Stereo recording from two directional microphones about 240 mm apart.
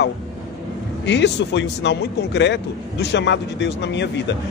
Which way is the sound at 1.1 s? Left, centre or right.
Left.